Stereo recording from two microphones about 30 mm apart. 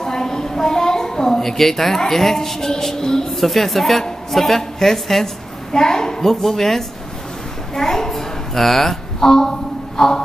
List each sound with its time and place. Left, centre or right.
0.0 s a woman's voice: centre
3.3 s a woman's voice: centre
5.7 s a woman's voice: centre
6.4 s a woman's voice: centre
7.7 s a sound: centre